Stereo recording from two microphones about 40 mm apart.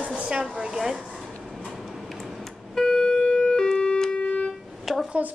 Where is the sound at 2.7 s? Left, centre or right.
Centre.